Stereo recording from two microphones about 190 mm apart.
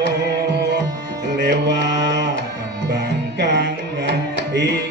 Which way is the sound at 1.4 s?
65° right (ahead or behind).